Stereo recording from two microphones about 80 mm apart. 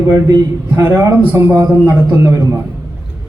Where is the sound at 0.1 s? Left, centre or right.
Right.